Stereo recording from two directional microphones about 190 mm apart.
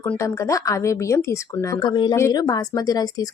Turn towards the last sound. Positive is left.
turn(degrees=20)  # may be behind; listen again after turning